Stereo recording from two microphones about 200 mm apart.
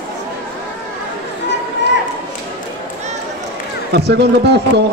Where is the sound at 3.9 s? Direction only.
55° right (ahead or behind).